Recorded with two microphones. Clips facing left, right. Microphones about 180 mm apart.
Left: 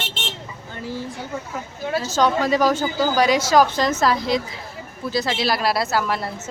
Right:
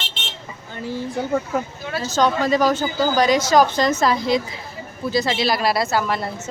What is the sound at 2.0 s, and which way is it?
A woman's voice, 10° left (ahead or behind).